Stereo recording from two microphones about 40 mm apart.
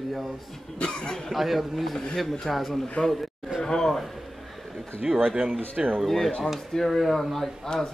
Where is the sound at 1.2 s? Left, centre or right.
Centre.